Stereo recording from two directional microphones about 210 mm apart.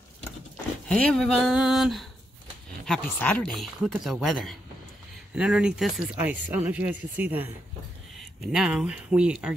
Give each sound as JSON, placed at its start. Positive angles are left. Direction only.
{"t": 0.8, "sound": "speech", "side_deg": 5}